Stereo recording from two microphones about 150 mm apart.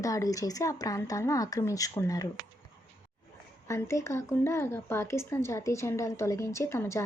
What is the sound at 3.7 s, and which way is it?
Speech, 20° left (ahead or behind).